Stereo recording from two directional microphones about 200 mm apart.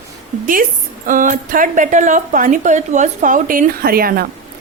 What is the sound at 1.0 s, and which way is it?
A woman's voice, 40° right (ahead or behind).